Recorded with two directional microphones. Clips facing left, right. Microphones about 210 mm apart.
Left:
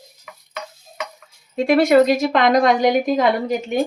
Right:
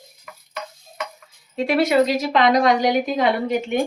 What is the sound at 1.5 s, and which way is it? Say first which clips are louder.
Speech: left 4 dB; 50° left (ahead or behind).